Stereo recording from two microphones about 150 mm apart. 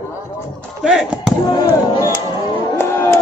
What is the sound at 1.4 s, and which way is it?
Music, 25° left (ahead or behind).